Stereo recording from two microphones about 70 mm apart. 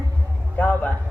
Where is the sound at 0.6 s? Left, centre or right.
Left.